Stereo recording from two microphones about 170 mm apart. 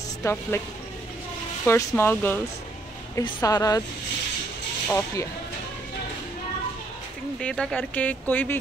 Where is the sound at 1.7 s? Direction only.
15° left (ahead or behind).